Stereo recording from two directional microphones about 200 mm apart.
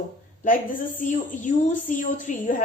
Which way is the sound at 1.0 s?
40° left (ahead or behind).